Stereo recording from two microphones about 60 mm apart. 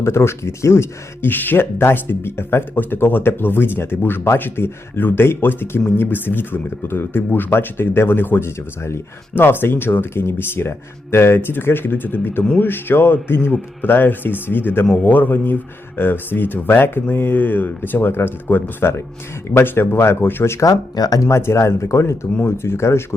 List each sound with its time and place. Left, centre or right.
0.0 s speech: left
20.7 s speech: left